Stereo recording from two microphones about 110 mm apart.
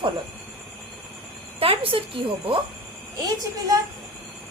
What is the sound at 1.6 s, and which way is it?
A woman's voice, 60° right (ahead or behind).